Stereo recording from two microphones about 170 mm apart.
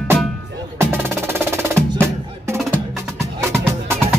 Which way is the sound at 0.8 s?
15° right (ahead or behind).